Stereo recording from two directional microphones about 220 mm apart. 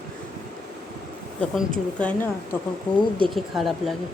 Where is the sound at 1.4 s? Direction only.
5° left (ahead or behind).